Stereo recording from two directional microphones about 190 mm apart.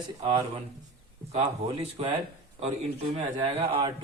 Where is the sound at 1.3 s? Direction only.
35° right (ahead or behind).